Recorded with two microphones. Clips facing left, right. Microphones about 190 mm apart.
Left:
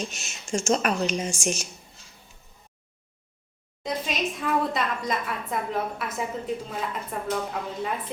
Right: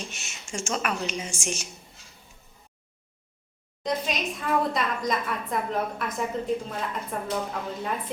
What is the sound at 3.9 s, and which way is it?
A woman's voice, centre (ahead or behind).